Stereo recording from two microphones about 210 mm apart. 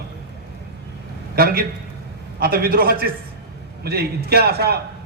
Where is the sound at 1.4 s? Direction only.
45° right (ahead or behind).